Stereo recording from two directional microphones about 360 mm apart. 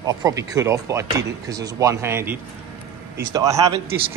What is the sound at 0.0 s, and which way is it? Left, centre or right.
Speech, centre.